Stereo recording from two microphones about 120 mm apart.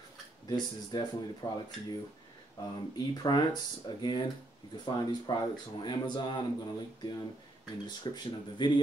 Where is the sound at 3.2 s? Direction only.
40° left (ahead or behind).